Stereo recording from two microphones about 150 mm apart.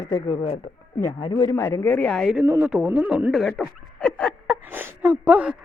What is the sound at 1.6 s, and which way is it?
Speech, 15° left (ahead or behind).